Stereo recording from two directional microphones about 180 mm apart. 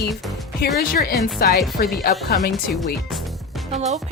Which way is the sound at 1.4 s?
60° left (ahead or behind).